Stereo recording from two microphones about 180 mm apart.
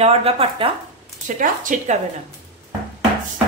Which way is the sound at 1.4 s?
45° right (ahead or behind).